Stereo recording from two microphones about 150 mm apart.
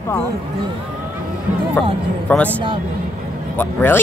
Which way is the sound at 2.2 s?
10° left (ahead or behind).